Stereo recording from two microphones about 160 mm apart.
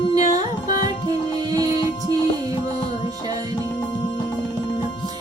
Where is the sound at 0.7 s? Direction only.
25° right (ahead or behind).